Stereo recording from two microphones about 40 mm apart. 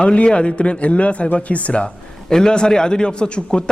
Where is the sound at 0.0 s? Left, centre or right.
Left.